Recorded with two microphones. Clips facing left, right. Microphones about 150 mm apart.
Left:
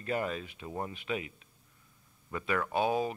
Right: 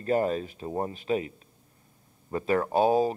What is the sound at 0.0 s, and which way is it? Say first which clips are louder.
Speech: right 8 dB; 40° right (ahead or behind).